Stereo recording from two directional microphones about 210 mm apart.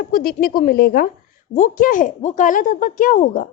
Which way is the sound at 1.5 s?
35° left (ahead or behind).